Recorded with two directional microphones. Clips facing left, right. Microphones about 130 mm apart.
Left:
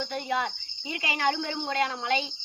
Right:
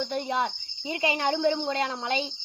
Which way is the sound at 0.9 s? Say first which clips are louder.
Right 2 dB; 30° right (ahead or behind).